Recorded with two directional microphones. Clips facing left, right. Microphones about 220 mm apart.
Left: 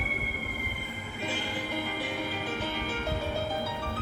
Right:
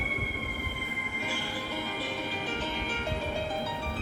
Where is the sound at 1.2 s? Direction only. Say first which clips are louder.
Left 3 dB; 20° left (ahead or behind).